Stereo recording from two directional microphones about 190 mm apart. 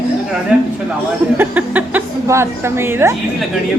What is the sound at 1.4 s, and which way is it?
A woman's voice, 10° right (ahead or behind).